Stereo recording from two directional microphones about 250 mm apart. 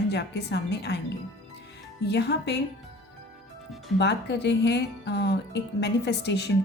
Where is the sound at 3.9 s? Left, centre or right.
Left.